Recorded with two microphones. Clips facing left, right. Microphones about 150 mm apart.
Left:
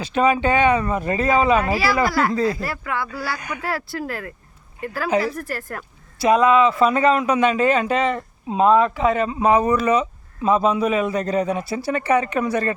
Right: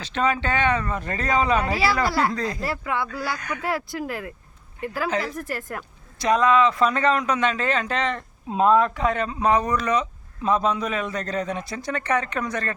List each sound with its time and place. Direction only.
0.0 s speech: 10° left (ahead or behind)
2.0 s speech: 25° right (ahead or behind)
2.3 s speech: 5° left (ahead or behind)
2.6 s speech: 25° right (ahead or behind)
3.3 s speech: 10° left (ahead or behind)
3.6 s speech: 20° right (ahead or behind)
6.1 s speech: 10° left (ahead or behind)